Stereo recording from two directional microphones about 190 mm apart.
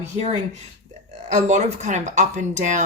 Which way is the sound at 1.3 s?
35° right (ahead or behind).